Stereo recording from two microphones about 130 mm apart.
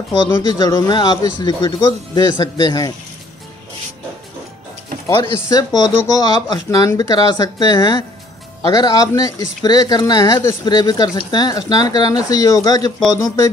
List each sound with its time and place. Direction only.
0.4 s speech: 30° left (ahead or behind)
5.0 s speech: 20° left (ahead or behind)